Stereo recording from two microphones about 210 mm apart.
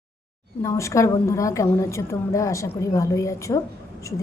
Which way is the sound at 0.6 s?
15° left (ahead or behind).